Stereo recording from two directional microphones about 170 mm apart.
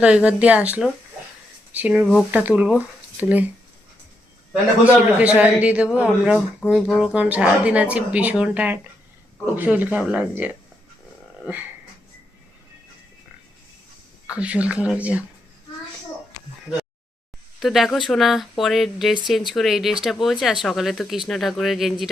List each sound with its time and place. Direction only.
0.0 s speech: 5° right (ahead or behind)
4.9 s speech: 10° right (ahead or behind)
14.3 s speech: 5° right (ahead or behind)
17.6 s speech: centre (ahead or behind)